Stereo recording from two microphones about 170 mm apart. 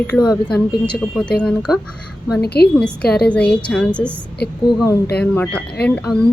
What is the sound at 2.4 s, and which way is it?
Speech, 70° left (ahead or behind).